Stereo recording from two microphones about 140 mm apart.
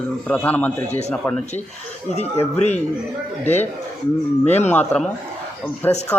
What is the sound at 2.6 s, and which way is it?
Speech, 50° left (ahead or behind).